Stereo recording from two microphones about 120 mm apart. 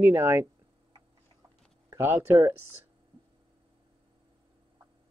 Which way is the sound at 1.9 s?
20° right (ahead or behind).